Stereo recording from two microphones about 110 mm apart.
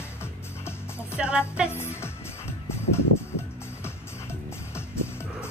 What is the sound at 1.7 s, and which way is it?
Music, 25° left (ahead or behind).